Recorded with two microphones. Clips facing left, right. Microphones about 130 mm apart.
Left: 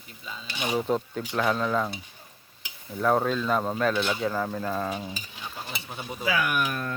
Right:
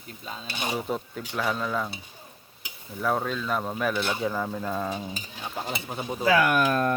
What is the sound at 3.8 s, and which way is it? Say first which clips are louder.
Speech: left 1 dB; 10° right (ahead or behind).